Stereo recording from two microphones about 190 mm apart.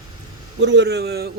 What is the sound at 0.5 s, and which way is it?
Speech, 65° right (ahead or behind).